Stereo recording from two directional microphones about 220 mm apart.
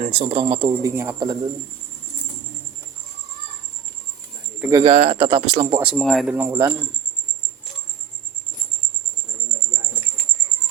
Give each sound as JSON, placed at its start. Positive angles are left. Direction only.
{"t": 0.1, "sound": "speech", "side_deg": -25}
{"t": 4.8, "sound": "speech", "side_deg": -25}
{"t": 5.8, "sound": "speech", "side_deg": 0}